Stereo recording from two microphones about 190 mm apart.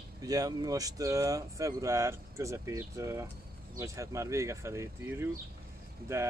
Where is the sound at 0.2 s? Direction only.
20° right (ahead or behind).